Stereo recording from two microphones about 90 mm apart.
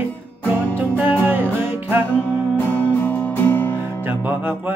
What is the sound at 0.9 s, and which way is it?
Music, 20° right (ahead or behind).